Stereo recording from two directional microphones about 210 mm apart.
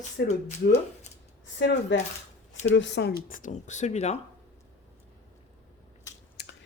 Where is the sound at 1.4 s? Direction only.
60° left (ahead or behind); by 4.1 s 30° left (ahead or behind).